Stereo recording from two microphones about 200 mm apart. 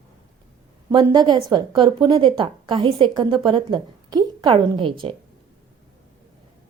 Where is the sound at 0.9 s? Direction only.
20° right (ahead or behind).